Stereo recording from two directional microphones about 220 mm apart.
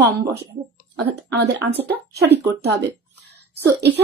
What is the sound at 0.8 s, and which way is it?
Speech, 45° right (ahead or behind).